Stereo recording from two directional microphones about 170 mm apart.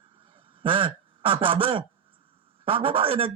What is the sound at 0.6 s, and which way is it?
A man's voice, 30° right (ahead or behind).